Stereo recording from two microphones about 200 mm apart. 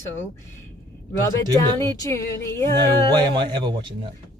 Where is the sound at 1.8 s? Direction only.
15° left (ahead or behind).